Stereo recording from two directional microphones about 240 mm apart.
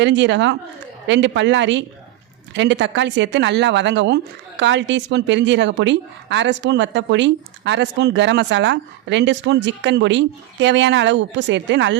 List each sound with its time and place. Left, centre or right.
0.0 s a woman's voice: right